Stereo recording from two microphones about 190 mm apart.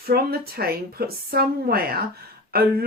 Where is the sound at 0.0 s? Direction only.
50° right (ahead or behind).